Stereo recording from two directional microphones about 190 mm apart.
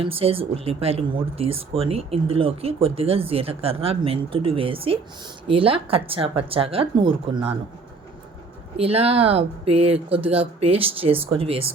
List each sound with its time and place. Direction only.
0.0 s a woman's voice: 30° right (ahead or behind)
8.7 s a woman's voice: 30° right (ahead or behind)